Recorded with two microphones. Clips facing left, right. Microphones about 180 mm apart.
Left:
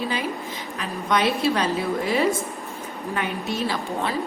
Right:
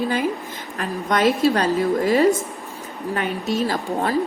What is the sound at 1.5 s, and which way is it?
A woman's voice, 40° right (ahead or behind).